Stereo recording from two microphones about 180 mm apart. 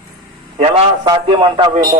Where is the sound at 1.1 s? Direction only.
25° right (ahead or behind).